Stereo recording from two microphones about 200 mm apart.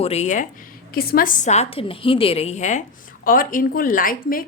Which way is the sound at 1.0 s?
45° left (ahead or behind).